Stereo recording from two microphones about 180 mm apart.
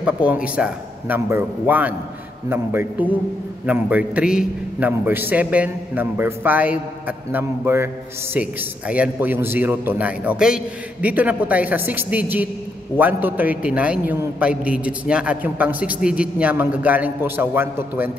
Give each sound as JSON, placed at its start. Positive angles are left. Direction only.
{"t": 0.0, "sound": "a man's voice", "side_deg": -5}